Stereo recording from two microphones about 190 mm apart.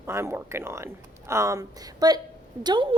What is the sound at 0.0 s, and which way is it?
A woman's voice, 15° right (ahead or behind).